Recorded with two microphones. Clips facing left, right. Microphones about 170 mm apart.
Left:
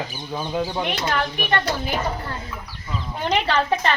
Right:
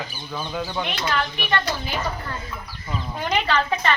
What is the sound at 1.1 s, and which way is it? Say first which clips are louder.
Speech: left 1 dB; 45° left (ahead or behind).